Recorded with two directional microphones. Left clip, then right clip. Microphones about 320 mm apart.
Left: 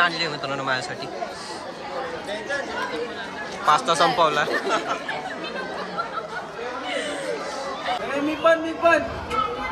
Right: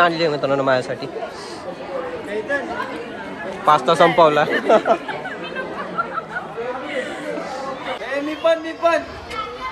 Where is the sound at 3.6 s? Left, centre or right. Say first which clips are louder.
Right 5 dB; centre.